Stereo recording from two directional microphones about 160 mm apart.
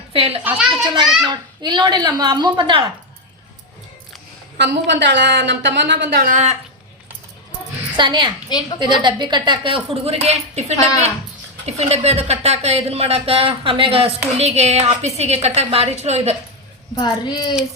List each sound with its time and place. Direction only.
0.1 s a woman's voice: 35° right (ahead or behind)
0.4 s a sound: 5° right (ahead or behind)
1.2 s a child's voice: 30° right (ahead or behind)
4.5 s a woman's voice: 90° right; by 6.6 s 50° right (ahead or behind)
7.9 s a child's voice: 30° right (ahead or behind)
16.9 s a child's voice: 25° left (ahead or behind)